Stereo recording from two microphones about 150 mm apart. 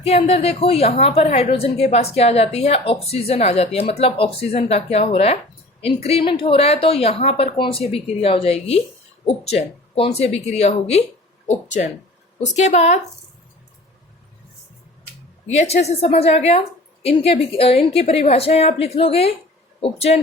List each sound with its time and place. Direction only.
0.0 s a woman's voice: 40° left (ahead or behind)
15.5 s a woman's voice: 45° left (ahead or behind)